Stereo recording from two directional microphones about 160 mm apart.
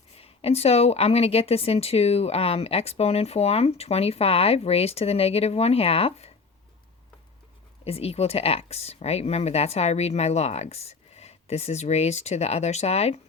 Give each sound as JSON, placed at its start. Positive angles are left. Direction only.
{"t": 0.2, "sound": "a woman's voice", "side_deg": 40}
{"t": 7.9, "sound": "a woman's voice", "side_deg": 40}